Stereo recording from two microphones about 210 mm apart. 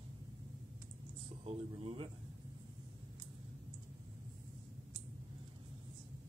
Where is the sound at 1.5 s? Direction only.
25° right (ahead or behind).